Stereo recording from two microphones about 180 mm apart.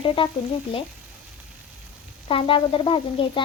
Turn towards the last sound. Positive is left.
turn(degrees=30)  # may be behind; listen again after turning